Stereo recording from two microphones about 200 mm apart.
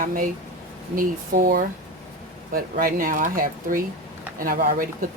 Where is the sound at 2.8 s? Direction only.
45° right (ahead or behind).